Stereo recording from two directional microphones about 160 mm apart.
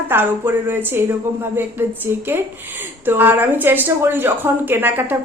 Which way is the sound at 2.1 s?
15° right (ahead or behind).